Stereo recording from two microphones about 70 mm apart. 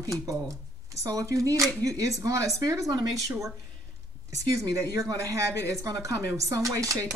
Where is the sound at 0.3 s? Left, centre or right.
Right.